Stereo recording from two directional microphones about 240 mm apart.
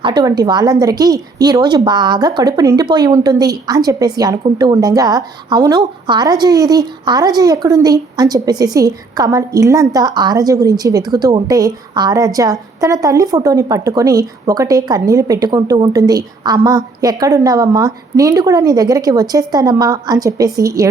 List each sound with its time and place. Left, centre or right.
0.0 s a woman's voice: centre